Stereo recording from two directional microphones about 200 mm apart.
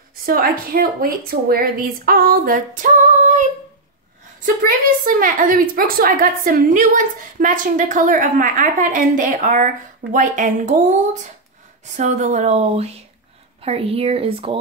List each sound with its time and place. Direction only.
0.2 s a woman's voice: 45° right (ahead or behind)
11.8 s a woman's voice: 35° right (ahead or behind)